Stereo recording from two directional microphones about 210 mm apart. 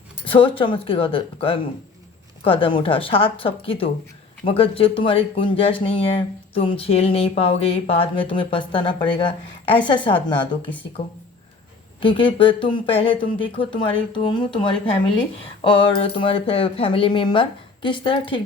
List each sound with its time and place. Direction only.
0.3 s speech: 25° left (ahead or behind)
11.9 s speech: 25° left (ahead or behind)